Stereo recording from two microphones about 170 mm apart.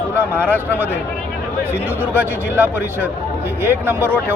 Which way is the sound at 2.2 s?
10° right (ahead or behind).